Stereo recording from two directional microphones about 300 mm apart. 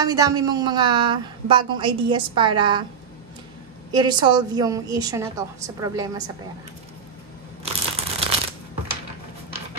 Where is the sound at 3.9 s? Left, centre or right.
Centre.